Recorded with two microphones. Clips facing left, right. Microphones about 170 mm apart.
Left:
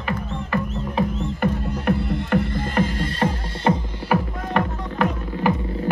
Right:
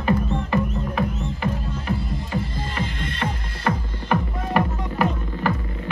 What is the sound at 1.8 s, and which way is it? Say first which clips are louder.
Music: left 8 dB; 65° left (ahead or behind).